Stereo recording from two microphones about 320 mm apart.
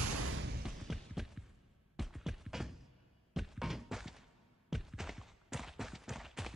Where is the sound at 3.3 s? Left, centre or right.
Centre.